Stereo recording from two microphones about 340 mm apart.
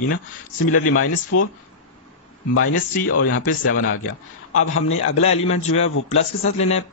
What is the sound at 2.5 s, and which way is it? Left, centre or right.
Speech, left.